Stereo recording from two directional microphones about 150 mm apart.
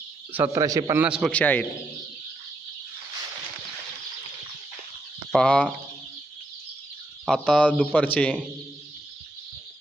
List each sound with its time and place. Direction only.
0.3 s speech: 15° right (ahead or behind)
1.0 s speech: 5° right (ahead or behind)
1.3 s speech: 10° left (ahead or behind)
5.3 s speech: 5° left (ahead or behind)
7.3 s speech: 5° left (ahead or behind)